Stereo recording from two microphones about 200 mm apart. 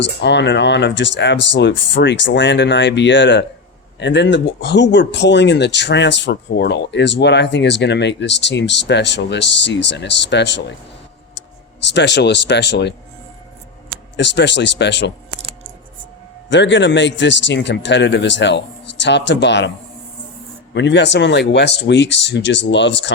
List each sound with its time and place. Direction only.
0.0 s speech: 60° left (ahead or behind)
11.9 s speech: 60° left (ahead or behind)
14.2 s speech: 60° left (ahead or behind)
16.5 s speech: 65° left (ahead or behind)
20.7 s speech: 60° left (ahead or behind)